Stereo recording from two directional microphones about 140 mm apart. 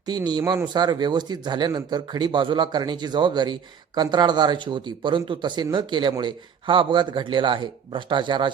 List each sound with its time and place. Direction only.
0.0 s speech: 30° right (ahead or behind)